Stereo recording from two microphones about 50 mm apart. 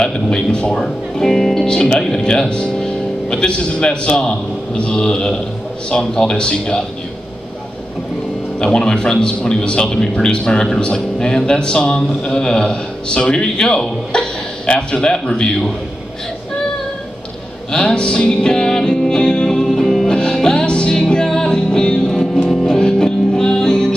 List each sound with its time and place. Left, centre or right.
0.0 s a man's voice: centre
1.7 s a man's voice: centre
8.5 s a man's voice: centre
17.7 s music: centre
20.1 s music: centre
22.0 s music: centre